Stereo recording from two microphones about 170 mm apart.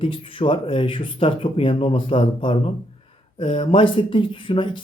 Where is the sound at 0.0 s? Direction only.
30° left (ahead or behind).